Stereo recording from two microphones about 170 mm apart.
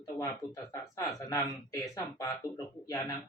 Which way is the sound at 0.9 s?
20° left (ahead or behind).